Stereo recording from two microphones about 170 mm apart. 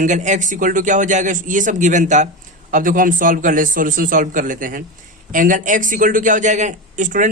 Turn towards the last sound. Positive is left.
turn(degrees=-50)  # may be behind; listen again after turning